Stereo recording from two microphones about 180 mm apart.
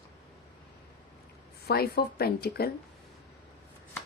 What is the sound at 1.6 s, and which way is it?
Speech, 60° left (ahead or behind).